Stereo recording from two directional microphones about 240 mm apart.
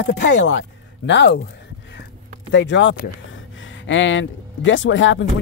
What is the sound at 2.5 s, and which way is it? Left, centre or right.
Speech, left.